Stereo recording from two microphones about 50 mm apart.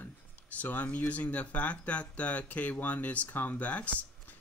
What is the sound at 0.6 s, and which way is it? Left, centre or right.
Speech, left.